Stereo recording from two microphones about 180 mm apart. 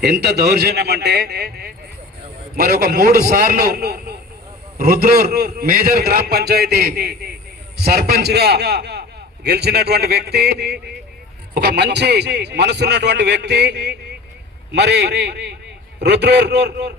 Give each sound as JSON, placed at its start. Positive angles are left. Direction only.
{"t": 0.0, "sound": "a man's voice", "side_deg": -60}